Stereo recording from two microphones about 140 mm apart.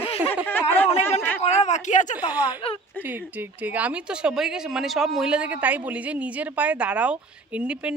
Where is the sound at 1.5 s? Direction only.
55° left (ahead or behind).